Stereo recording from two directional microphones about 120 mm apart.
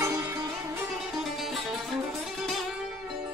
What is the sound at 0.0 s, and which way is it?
Music, 15° right (ahead or behind).